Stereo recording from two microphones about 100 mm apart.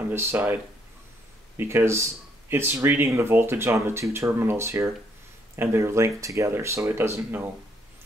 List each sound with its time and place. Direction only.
0.1 s speech: 25° right (ahead or behind)
1.6 s speech: 25° right (ahead or behind)